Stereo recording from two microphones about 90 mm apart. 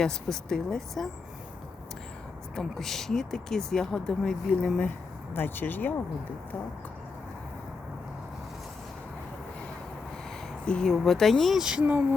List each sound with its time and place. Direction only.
0.0 s speech: 5° left (ahead or behind)
2.6 s speech: 5° left (ahead or behind)
5.3 s speech: 25° left (ahead or behind)
10.7 s speech: 5° left (ahead or behind); by 12.0 s 15° right (ahead or behind)